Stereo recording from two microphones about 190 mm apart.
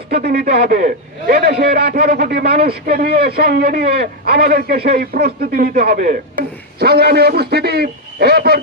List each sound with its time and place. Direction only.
0.1 s a man's voice: 55° right (ahead or behind)